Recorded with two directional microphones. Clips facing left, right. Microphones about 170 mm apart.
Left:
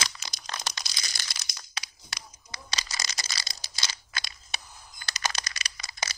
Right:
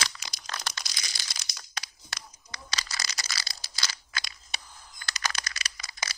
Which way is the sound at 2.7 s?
20° left (ahead or behind).